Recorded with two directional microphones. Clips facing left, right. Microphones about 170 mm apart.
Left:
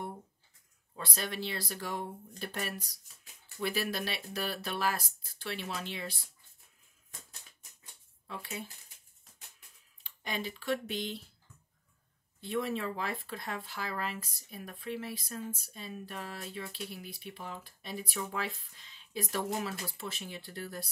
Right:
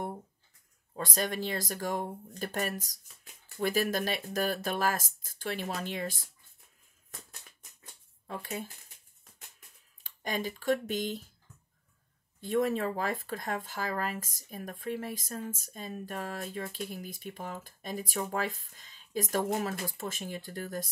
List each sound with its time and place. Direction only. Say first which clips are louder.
0.9 s speech: right 5 dB; 45° right (ahead or behind)
7.8 s a sound: right 5 dB; 45° right (ahead or behind)
10.0 s speech: right 4 dB; 45° right (ahead or behind)
12.4 s speech: right 5 dB; 45° right (ahead or behind)